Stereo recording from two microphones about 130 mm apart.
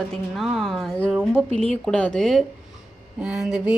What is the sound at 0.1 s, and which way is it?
A woman's voice, centre (ahead or behind).